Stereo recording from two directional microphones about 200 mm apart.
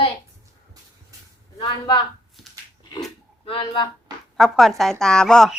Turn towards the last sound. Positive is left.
turn(degrees=5)  # may be behind; listen again after turning